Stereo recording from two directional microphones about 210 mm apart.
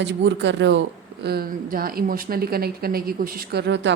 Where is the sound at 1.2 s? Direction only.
45° right (ahead or behind).